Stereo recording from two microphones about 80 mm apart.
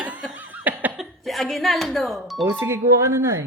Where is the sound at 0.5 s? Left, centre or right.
Right.